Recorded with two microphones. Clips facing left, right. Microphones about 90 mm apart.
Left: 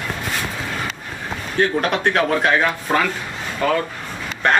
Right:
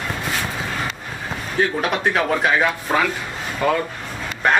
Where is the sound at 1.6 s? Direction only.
5° right (ahead or behind).